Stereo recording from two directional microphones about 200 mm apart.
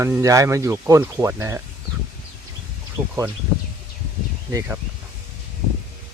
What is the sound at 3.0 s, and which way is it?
Speech, 10° right (ahead or behind).